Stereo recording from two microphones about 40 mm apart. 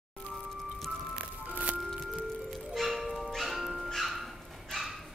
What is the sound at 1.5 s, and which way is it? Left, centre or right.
Music, right.